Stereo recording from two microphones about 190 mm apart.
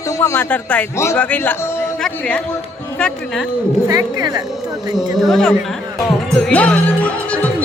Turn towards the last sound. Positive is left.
turn(degrees=5)  # may be behind; listen again after turning